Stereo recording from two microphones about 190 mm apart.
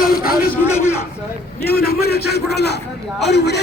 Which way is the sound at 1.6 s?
55° left (ahead or behind).